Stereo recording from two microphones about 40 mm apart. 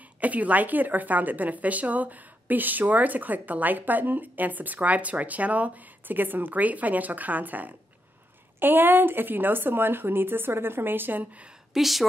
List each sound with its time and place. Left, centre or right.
0.2 s a woman's voice: right
8.5 s speech: right
11.7 s a woman's voice: centre